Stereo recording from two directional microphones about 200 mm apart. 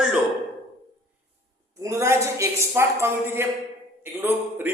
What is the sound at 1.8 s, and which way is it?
A woman's voice, 15° right (ahead or behind).